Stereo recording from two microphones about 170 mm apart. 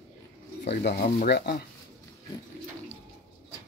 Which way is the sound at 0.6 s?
80° left.